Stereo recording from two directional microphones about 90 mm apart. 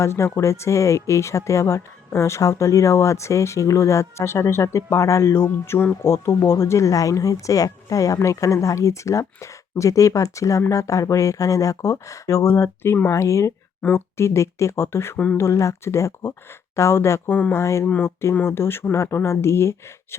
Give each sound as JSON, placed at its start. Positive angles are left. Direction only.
{"t": 0.0, "sound": "speech", "side_deg": 30}
{"t": 17.8, "sound": "speech", "side_deg": 15}